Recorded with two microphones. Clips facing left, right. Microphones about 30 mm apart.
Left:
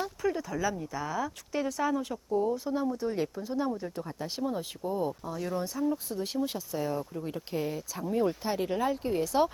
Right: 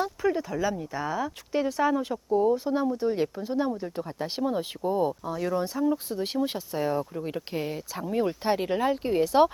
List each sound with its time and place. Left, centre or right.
0.0 s speech: centre
8.4 s speech: right